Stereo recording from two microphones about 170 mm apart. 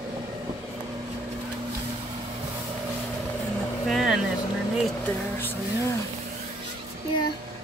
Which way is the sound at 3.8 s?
Centre (ahead or behind).